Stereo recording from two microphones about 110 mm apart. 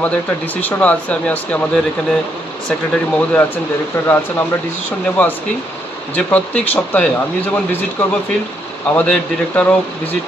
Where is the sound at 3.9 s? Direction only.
20° left (ahead or behind).